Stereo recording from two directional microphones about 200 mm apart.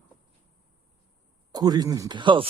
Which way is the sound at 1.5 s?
20° right (ahead or behind).